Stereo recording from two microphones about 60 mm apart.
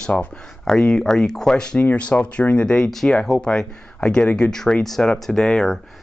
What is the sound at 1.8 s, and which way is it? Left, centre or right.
Speech, left.